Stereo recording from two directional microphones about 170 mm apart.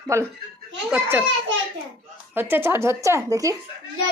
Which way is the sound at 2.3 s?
10° right (ahead or behind).